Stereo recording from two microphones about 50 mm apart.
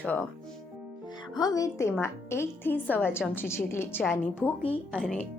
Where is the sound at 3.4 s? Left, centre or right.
Left.